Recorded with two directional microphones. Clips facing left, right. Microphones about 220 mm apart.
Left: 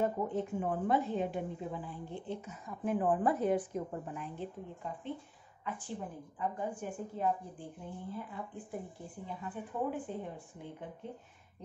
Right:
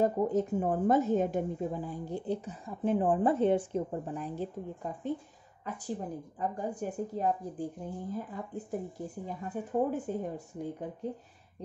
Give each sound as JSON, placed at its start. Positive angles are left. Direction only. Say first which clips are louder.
{"t": 0.0, "sound": "a woman's voice", "louder": "right 6 dB", "side_deg": -40}